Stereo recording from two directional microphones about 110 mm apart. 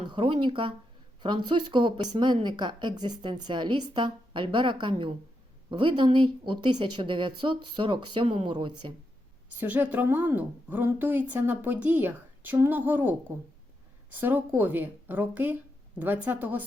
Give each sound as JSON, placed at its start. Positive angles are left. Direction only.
{"t": 0.1, "sound": "speech", "side_deg": -45}
{"t": 6.1, "sound": "speech", "side_deg": -50}
{"t": 9.6, "sound": "a woman's voice", "side_deg": -15}